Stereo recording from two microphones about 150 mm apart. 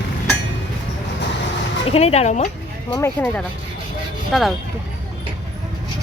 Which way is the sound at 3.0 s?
10° left (ahead or behind).